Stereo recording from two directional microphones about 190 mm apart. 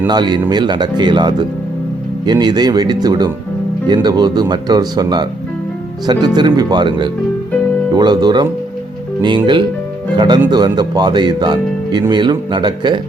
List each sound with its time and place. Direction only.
0.1 s speech: 25° right (ahead or behind)